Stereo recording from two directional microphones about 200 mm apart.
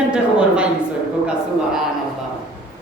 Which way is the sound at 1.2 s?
Centre (ahead or behind).